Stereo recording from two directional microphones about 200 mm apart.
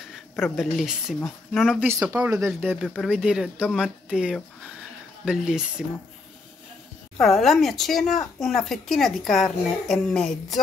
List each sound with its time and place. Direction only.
0.1 s speech: centre (ahead or behind)
1.9 s speech: 10° right (ahead or behind)
2.8 s speech: 5° left (ahead or behind)
7.2 s speech: centre (ahead or behind)